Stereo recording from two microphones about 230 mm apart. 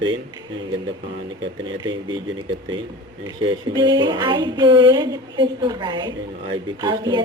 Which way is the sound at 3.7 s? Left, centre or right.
Centre.